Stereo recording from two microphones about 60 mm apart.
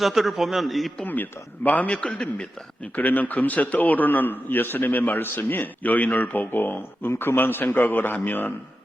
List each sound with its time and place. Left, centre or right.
0.0 s a man's voice: centre
1.0 s a man's voice: left
2.9 s a man's voice: left